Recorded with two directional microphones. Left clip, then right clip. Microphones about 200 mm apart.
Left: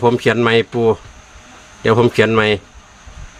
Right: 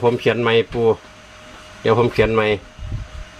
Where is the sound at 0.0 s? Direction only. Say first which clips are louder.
Left 3 dB; 35° left (ahead or behind).